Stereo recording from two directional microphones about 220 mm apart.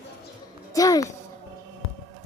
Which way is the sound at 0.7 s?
15° left (ahead or behind).